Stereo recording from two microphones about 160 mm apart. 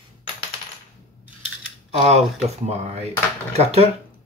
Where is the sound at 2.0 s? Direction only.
45° right (ahead or behind).